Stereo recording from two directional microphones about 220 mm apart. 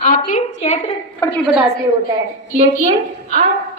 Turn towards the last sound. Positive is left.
turn(degrees=35)  # may be behind; listen again after turning